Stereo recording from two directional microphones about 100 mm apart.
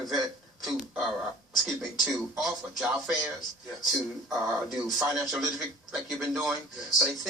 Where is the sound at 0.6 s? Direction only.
Centre (ahead or behind).